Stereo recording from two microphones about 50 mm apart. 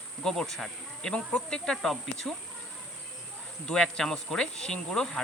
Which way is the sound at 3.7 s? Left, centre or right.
Centre.